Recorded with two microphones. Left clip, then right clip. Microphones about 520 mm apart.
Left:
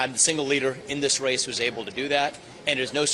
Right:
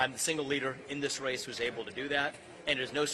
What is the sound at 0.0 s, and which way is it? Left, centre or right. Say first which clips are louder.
A man's voice: left 7 dB; left.